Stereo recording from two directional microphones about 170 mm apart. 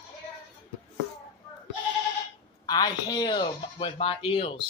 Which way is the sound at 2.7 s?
25° left (ahead or behind).